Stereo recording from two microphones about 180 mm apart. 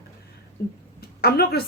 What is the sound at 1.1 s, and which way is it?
Speech, 60° left (ahead or behind).